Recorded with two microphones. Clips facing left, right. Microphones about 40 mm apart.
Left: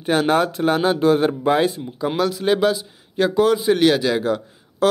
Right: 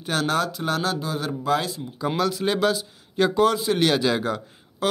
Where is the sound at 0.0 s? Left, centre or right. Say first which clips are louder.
Left 6 dB; centre.